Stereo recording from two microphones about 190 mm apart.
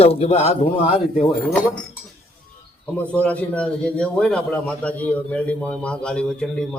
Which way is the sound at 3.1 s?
5° left (ahead or behind).